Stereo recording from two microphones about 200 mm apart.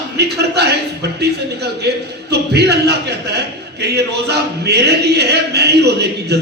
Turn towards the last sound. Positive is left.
turn(degrees=-55)  # may be behind; listen again after turning